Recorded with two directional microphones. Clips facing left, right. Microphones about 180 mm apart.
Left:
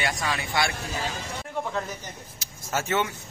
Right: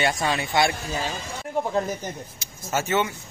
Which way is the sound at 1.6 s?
35° right (ahead or behind).